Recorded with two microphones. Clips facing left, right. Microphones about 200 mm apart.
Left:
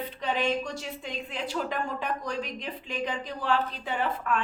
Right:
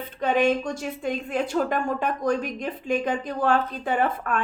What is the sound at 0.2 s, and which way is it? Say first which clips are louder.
A woman's voice: right 7 dB; 50° right (ahead or behind).